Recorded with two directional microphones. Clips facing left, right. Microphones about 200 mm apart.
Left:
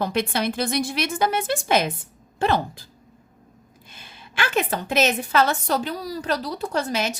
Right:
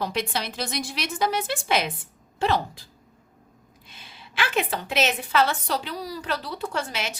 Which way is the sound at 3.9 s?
50° left (ahead or behind).